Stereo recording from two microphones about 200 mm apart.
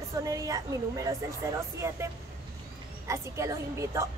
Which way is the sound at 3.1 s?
15° right (ahead or behind).